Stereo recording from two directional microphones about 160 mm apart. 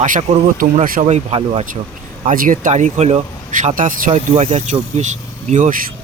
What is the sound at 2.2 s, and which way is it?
Speech, 55° right (ahead or behind).